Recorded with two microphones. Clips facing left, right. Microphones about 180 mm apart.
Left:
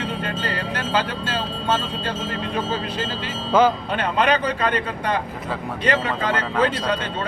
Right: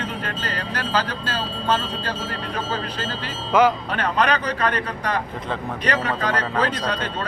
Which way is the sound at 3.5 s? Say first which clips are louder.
Even; 25° left (ahead or behind).